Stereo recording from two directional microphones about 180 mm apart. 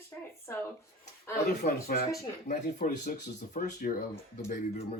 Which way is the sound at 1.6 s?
45° left (ahead or behind).